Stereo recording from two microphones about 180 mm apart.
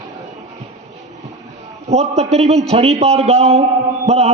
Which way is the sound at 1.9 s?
35° right (ahead or behind).